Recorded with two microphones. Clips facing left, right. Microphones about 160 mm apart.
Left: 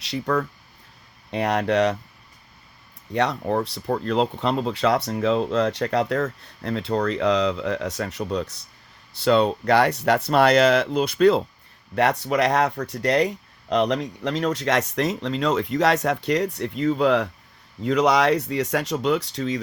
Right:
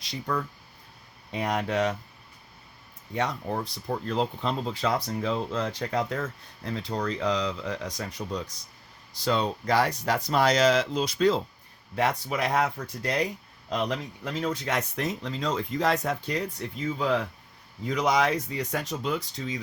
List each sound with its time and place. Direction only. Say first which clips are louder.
0.0 s speech: left 7 dB; 70° left (ahead or behind)
3.1 s speech: left 7 dB; 70° left (ahead or behind)